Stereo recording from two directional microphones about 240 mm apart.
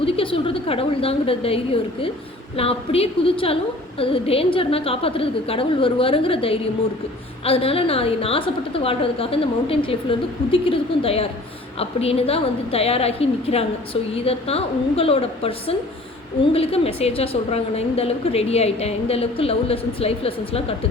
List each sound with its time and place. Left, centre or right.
0.0 s a woman's voice: left